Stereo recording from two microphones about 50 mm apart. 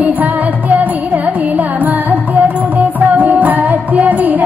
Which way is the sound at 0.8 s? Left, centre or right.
Right.